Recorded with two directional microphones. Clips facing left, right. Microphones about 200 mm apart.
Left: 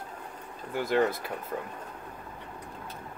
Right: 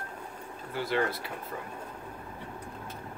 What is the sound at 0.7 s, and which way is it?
Speech, 50° left (ahead or behind).